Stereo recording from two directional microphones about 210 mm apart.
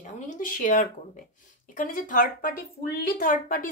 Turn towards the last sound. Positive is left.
turn(degrees=40)  # may be behind; listen again after turning